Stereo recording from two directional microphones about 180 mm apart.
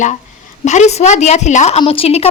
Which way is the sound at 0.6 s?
40° left (ahead or behind).